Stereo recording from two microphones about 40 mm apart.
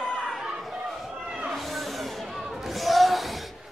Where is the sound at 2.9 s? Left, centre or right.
Centre.